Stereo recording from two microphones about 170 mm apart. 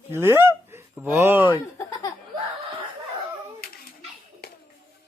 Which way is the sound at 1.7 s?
20° left (ahead or behind).